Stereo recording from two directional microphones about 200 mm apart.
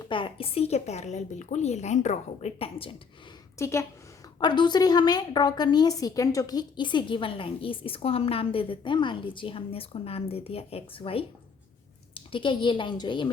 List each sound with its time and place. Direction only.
0.1 s a woman's voice: 25° left (ahead or behind)
3.6 s a woman's voice: 15° left (ahead or behind)